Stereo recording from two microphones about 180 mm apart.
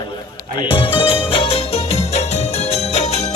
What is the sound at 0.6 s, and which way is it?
Music, 30° left (ahead or behind).